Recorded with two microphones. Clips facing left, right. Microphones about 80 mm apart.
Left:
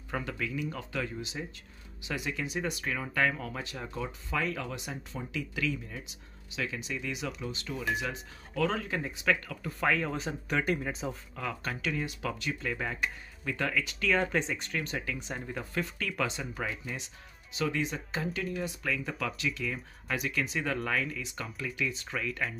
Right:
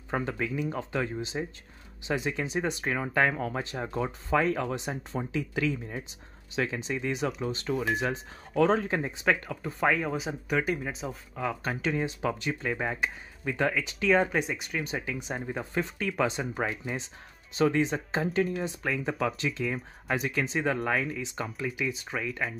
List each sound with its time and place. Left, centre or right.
0.1 s speech: right; by 11.1 s centre
11.3 s speech: centre